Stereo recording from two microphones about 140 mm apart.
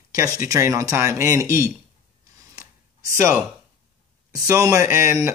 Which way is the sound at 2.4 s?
20° right (ahead or behind).